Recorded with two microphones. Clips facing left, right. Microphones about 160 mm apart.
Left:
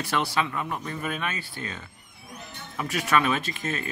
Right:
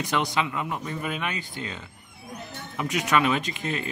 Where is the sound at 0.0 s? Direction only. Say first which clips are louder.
Right 1 dB; 20° right (ahead or behind).